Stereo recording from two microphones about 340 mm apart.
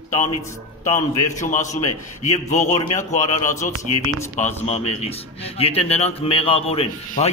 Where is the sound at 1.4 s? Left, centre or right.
Left.